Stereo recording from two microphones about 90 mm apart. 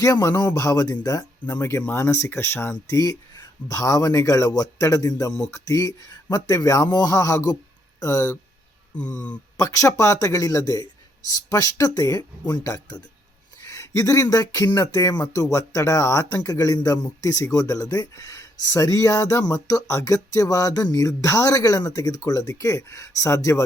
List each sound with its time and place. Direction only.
0.0 s speech: 35° left (ahead or behind)
1.9 s speech: 30° left (ahead or behind)
3.0 s speech: 45° left (ahead or behind)
9.0 s speech: 15° left (ahead or behind)
9.6 s speech: 35° left (ahead or behind)